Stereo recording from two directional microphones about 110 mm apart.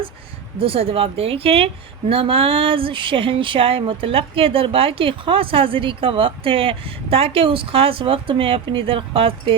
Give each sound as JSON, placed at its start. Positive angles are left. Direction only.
{"t": 0.6, "sound": "speech", "side_deg": -60}